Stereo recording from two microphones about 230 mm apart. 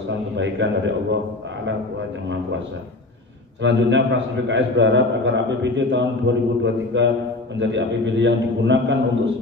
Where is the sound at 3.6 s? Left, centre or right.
Right.